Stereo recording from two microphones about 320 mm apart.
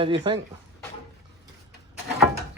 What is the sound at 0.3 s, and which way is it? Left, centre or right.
Speech, centre.